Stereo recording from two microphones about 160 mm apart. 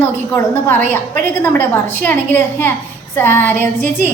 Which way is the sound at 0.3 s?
15° left (ahead or behind).